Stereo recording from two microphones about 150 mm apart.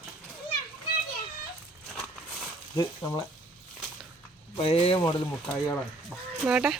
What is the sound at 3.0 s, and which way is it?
Speech, 15° left (ahead or behind).